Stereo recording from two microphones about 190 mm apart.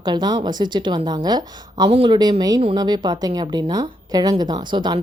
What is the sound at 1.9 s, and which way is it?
Speech, 35° right (ahead or behind).